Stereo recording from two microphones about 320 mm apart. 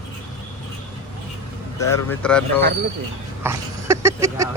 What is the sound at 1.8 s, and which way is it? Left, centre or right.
Speech, centre.